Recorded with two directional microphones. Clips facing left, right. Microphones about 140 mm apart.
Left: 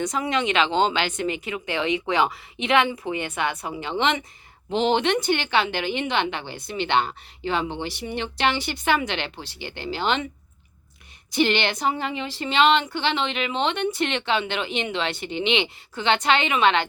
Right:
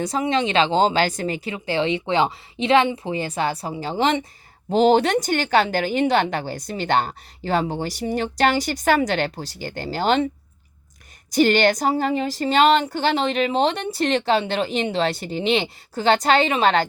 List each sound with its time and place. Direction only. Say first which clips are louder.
0.0 s a woman's voice: right 3 dB; 30° right (ahead or behind)
11.3 s a woman's voice: right 5 dB; 40° right (ahead or behind)